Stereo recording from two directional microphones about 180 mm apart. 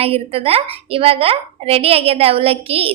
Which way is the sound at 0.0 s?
30° right (ahead or behind).